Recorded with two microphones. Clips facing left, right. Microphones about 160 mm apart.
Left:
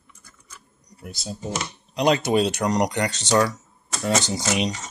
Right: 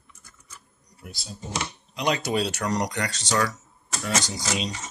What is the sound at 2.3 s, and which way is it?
Speech, 20° left (ahead or behind).